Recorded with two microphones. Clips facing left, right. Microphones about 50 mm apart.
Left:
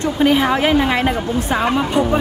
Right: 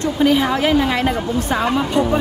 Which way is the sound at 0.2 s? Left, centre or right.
Left.